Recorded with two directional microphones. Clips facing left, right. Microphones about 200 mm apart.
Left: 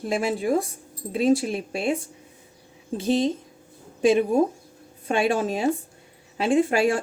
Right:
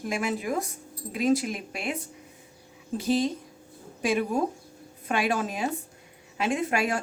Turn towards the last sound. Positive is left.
turn(degrees=30)  # may be behind; listen again after turning